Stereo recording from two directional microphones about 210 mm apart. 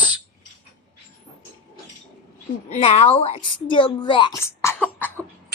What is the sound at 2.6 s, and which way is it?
A woman's voice, 30° left (ahead or behind).